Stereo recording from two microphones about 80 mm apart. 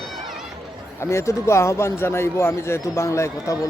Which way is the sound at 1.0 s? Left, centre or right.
Left.